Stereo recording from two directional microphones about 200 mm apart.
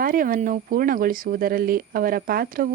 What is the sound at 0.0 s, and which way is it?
Speech, 45° right (ahead or behind).